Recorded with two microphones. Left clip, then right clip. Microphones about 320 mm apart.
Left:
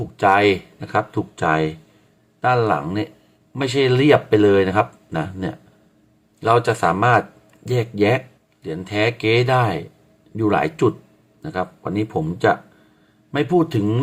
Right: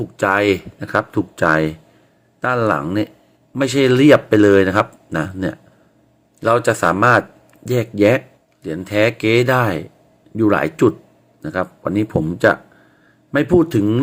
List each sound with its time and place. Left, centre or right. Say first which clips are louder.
0.2 s speech: left 1 dB; centre